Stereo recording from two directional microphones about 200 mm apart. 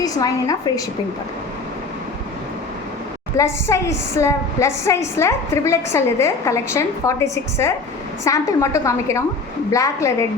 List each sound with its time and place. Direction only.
0.0 s a woman's voice: 20° left (ahead or behind)
3.3 s a woman's voice: 15° left (ahead or behind)